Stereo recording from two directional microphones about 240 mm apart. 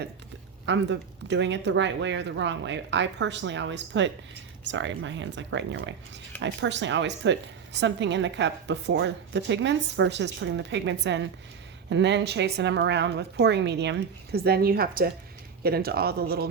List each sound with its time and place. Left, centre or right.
0.6 s a woman's voice: right